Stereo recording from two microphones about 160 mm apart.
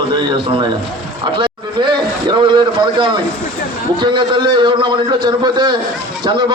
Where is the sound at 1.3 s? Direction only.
30° right (ahead or behind).